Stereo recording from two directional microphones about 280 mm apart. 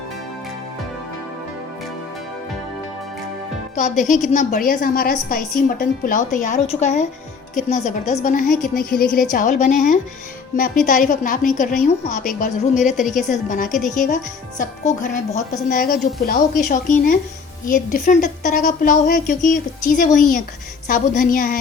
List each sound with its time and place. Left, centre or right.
3.8 s a woman's voice: left